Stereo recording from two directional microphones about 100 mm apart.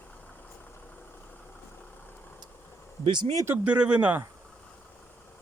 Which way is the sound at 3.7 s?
10° right (ahead or behind).